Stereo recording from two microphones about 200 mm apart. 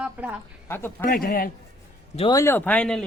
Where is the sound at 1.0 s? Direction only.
45° left (ahead or behind).